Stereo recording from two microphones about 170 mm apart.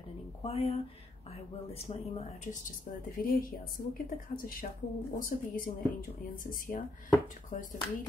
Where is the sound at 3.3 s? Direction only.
55° left (ahead or behind).